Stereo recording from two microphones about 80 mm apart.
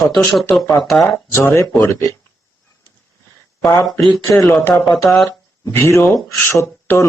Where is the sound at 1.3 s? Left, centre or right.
Left.